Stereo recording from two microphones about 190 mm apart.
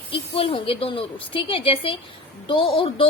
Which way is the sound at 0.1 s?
30° left (ahead or behind).